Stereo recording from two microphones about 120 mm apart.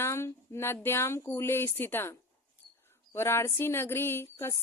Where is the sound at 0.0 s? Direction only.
20° left (ahead or behind).